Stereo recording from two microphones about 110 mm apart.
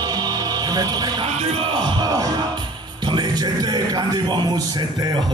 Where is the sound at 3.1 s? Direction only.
40° right (ahead or behind).